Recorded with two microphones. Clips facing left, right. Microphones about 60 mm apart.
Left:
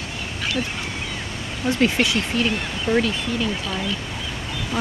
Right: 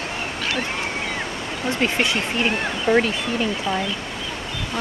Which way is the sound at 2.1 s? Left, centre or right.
Right.